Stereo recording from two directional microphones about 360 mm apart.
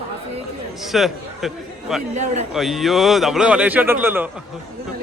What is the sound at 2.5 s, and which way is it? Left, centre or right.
A man's voice, centre.